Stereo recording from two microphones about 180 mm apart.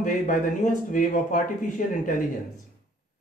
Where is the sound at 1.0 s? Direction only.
45° left (ahead or behind).